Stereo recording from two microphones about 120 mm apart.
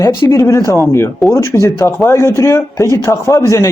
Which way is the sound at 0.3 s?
25° left (ahead or behind).